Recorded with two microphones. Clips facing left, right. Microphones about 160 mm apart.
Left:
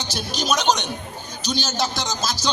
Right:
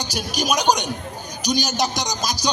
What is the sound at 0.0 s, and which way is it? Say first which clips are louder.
A man's voice: right 2 dB; 10° right (ahead or behind).